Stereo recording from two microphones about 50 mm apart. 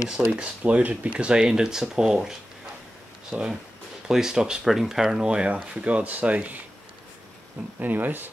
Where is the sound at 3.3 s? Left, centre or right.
Right.